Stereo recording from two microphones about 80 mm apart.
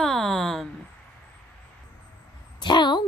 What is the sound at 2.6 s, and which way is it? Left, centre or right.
Speech, left.